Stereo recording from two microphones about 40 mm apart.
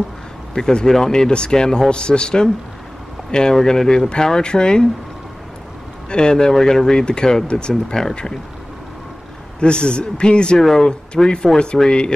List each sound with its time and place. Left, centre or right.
0.6 s speech: centre
4.1 s speech: centre
6.0 s speech: centre
9.6 s speech: left
10.6 s speech: centre